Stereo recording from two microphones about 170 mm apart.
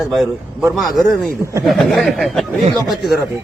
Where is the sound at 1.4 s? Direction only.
15° right (ahead or behind).